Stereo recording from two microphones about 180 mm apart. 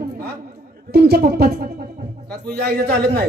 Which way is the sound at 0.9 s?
60° right (ahead or behind).